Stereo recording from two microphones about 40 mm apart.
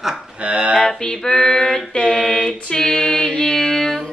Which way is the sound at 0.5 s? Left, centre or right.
Right.